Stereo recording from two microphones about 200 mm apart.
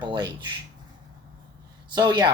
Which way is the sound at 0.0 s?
20° right (ahead or behind).